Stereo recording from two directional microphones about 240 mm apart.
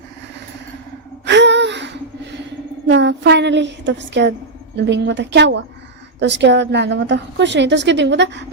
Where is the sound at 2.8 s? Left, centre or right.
Right.